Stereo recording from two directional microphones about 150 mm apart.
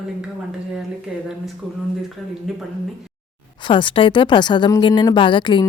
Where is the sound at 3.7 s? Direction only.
35° left (ahead or behind).